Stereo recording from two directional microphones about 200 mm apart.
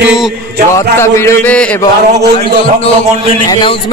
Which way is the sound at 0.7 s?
15° left (ahead or behind).